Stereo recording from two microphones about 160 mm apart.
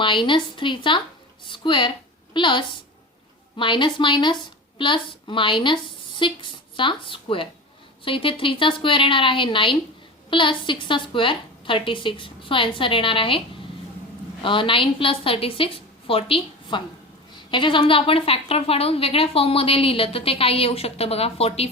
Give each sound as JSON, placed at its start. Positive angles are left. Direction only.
{"t": 0.0, "sound": "a woman's voice", "side_deg": 30}
{"t": 14.4, "sound": "a woman's voice", "side_deg": 30}